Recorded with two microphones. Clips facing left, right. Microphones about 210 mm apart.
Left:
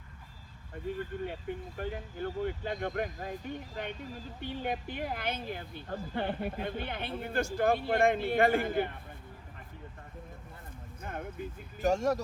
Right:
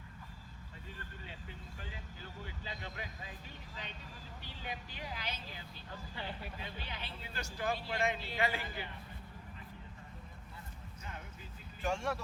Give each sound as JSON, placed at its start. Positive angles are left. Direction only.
{"t": 0.9, "sound": "speech", "side_deg": 55}
{"t": 11.0, "sound": "vehicle", "side_deg": 55}
{"t": 11.8, "sound": "speech", "side_deg": 40}